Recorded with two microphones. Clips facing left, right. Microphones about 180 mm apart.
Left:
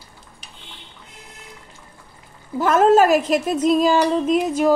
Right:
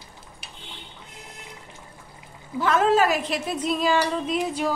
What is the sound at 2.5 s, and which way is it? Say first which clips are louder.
A woman's voice: left 6 dB; 45° left (ahead or behind).